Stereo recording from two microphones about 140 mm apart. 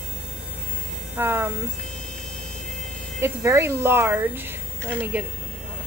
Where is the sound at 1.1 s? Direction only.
15° right (ahead or behind).